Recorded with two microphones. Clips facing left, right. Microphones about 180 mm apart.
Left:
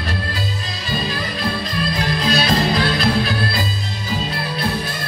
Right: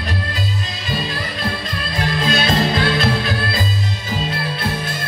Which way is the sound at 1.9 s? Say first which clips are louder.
Right 2 dB; 25° right (ahead or behind).